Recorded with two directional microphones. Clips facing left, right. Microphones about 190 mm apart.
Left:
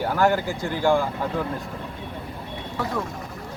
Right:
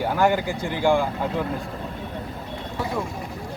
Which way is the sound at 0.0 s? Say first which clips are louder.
Even; 10° right (ahead or behind).